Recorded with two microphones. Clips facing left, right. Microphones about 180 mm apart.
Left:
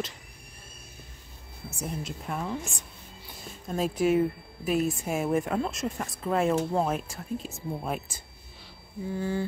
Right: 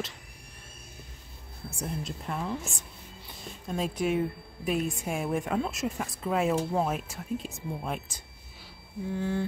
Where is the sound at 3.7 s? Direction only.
5° left (ahead or behind).